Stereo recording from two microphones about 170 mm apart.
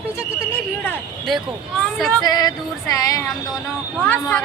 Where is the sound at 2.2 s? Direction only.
25° left (ahead or behind).